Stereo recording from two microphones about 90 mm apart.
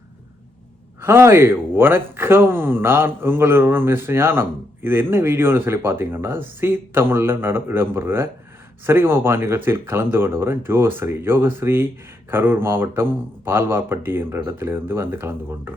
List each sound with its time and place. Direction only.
1.0 s speech: 25° right (ahead or behind)